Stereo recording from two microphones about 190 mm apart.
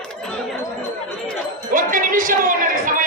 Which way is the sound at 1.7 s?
45° right (ahead or behind).